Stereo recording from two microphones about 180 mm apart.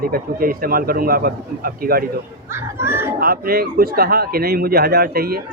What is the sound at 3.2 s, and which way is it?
Speech, 55° right (ahead or behind).